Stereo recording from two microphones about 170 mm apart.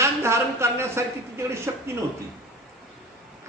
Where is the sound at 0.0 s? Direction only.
15° right (ahead or behind).